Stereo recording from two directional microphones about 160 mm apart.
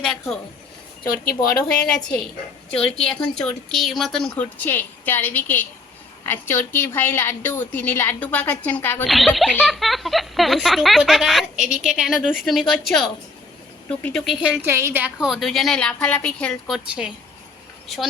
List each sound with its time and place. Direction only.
0.0 s speech: 5° left (ahead or behind)
1.1 s speech: 65° left (ahead or behind)
1.6 s a woman's voice: 5° left (ahead or behind)
9.0 s speech: centre (ahead or behind)
14.0 s speech: 5° left (ahead or behind)
14.4 s speech: 10° right (ahead or behind)